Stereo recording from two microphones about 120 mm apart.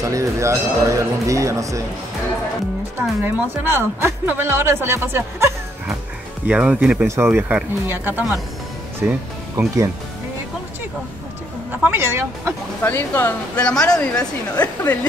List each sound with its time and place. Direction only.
0.0 s a woman's voice: 25° right (ahead or behind)
3.0 s a woman's voice: 15° right (ahead or behind)
6.4 s speech: 10° right (ahead or behind)
7.1 s speech: 20° right (ahead or behind)
11.9 s a woman's voice: 20° right (ahead or behind)
12.8 s speech: 15° left (ahead or behind)